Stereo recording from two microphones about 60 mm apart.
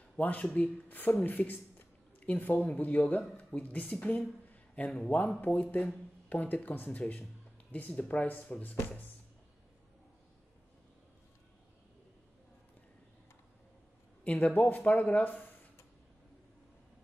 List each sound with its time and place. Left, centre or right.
0.2 s a man's voice: left
14.2 s speech: left